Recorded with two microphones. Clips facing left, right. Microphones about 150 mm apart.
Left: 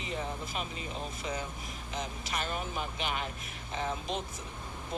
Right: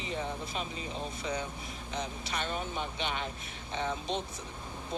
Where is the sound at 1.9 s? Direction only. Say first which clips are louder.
Even; 35° right (ahead or behind).